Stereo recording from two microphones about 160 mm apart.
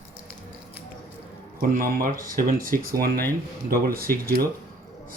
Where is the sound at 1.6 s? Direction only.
60° right (ahead or behind).